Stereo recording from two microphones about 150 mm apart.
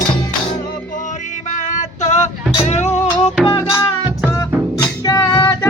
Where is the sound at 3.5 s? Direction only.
25° left (ahead or behind).